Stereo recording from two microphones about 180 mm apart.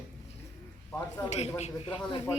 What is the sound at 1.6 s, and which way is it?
Speech, 40° left (ahead or behind).